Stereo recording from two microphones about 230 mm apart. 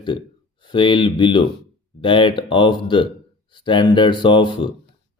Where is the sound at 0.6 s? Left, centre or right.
Left.